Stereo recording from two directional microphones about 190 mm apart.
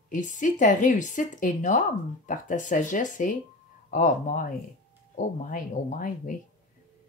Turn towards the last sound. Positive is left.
turn(degrees=45)  # may be behind; listen again after turning